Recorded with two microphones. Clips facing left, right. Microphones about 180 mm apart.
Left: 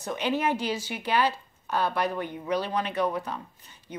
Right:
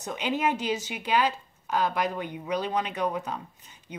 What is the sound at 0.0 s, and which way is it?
Speech, 15° right (ahead or behind).